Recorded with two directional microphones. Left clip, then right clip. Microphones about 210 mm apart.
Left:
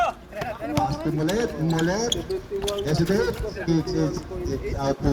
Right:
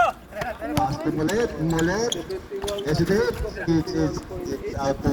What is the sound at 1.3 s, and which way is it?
Speech, 35° left (ahead or behind).